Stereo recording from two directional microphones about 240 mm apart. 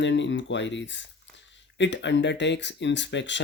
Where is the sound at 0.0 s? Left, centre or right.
Left.